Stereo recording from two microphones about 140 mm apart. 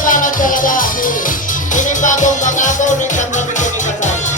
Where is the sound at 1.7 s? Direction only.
65° left (ahead or behind).